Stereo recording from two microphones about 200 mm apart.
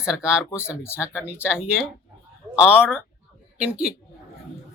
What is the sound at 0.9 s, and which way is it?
Speech, 10° left (ahead or behind).